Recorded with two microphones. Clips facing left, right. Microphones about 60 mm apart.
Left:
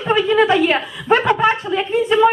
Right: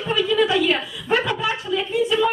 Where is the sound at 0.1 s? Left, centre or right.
Left.